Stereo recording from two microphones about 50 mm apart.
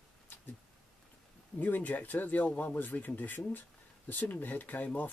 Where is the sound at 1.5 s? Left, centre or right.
Left.